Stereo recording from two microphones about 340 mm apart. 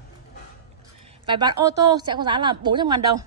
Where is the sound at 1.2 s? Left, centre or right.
Centre.